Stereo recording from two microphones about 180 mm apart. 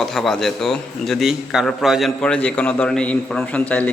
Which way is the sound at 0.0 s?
Centre (ahead or behind).